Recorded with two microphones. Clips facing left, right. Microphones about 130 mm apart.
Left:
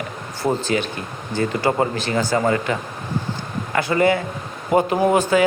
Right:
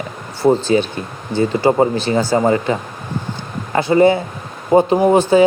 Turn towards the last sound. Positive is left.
turn(degrees=-25)  # may be behind; listen again after turning